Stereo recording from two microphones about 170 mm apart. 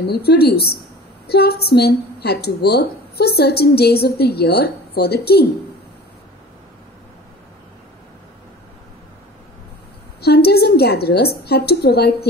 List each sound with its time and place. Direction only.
0.0 s a woman's voice: 70° left (ahead or behind)
10.2 s a woman's voice: 70° left (ahead or behind)